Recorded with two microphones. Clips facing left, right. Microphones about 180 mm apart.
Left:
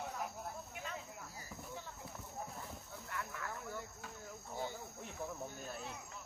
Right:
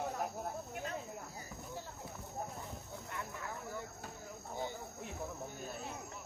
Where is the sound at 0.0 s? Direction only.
50° right (ahead or behind).